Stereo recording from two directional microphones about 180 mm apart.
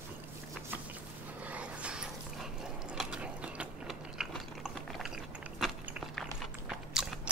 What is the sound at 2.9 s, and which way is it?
Ratchet, 5° right (ahead or behind).